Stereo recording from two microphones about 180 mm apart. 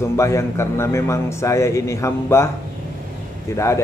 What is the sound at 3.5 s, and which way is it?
Speech, 15° left (ahead or behind).